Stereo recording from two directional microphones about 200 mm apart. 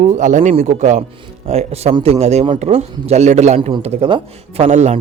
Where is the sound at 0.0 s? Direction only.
40° right (ahead or behind).